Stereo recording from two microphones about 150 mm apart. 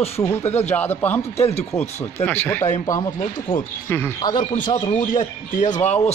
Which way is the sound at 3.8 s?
15° left (ahead or behind).